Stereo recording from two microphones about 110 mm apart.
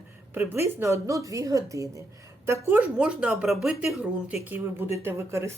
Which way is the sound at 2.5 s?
20° right (ahead or behind).